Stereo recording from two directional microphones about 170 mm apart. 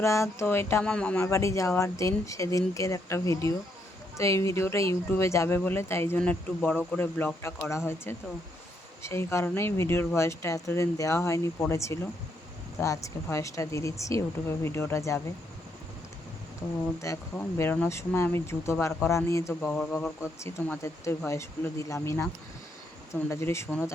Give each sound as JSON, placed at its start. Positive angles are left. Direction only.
{"t": 0.0, "sound": "speech", "side_deg": 15}
{"t": 9.0, "sound": "speech", "side_deg": 15}
{"t": 17.0, "sound": "speech", "side_deg": 15}
{"t": 20.4, "sound": "speech", "side_deg": 15}